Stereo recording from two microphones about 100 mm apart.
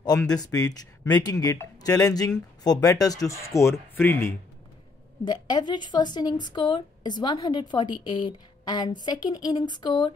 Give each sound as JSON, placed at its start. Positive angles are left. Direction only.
{"t": 0.3, "sound": "speech", "side_deg": 40}
{"t": 5.2, "sound": "speech", "side_deg": 45}